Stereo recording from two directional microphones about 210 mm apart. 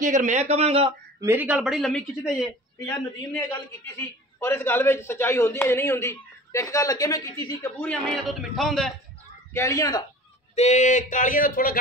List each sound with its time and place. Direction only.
0.0 s speech: 35° right (ahead or behind)
1.2 s speech: 10° right (ahead or behind)
2.8 s a man's voice: 15° left (ahead or behind); by 8.9 s centre (ahead or behind)
9.5 s a man's voice: 15° left (ahead or behind)
10.5 s speech: 35° left (ahead or behind)